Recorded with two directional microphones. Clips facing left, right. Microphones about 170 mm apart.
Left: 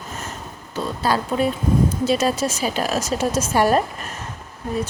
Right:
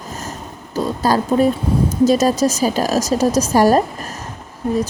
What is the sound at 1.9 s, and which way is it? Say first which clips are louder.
Speech: right 6 dB; 40° right (ahead or behind).